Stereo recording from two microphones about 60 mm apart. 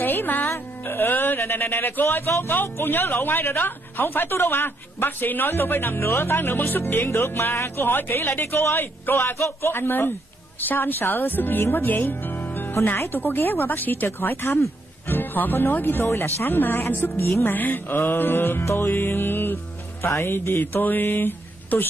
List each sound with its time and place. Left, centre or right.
0.0 s music: left
0.5 s a woman's voice: left
12.0 s speech: left
12.4 s music: left
12.8 s a woman's voice: left
15.0 s a woman's voice: left
18.6 s music: left
18.9 s music: left